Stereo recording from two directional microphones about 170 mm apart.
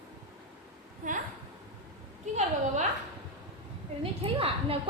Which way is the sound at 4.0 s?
35° right (ahead or behind).